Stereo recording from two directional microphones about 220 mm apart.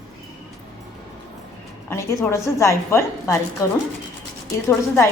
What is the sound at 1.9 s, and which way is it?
A woman's voice, 10° left (ahead or behind).